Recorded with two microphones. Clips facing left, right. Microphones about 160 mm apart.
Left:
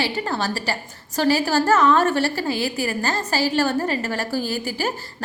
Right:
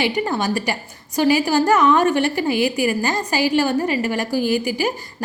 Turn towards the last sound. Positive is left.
turn(degrees=-15)  # may be behind; listen again after turning